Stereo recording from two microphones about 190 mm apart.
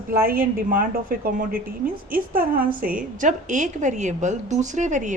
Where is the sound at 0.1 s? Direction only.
50° right (ahead or behind).